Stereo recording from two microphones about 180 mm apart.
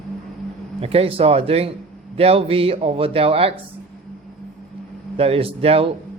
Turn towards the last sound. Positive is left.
turn(degrees=-30)  # may be behind; listen again after turning